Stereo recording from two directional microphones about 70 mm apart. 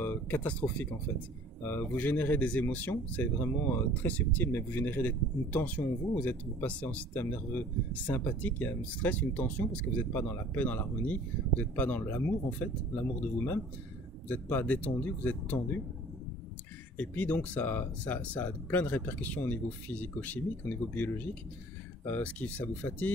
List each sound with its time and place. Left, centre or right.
0.0 s speech: left
3.9 s speech: left
14.3 s speech: left
16.9 s speech: left